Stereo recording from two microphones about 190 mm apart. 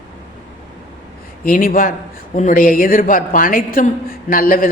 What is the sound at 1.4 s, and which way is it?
A woman's voice, 45° left (ahead or behind).